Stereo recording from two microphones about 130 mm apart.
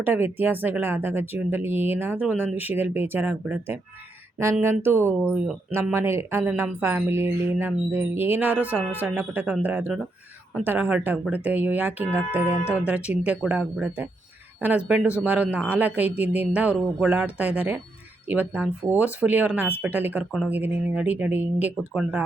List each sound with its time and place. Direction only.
0.0 s speech: 15° right (ahead or behind)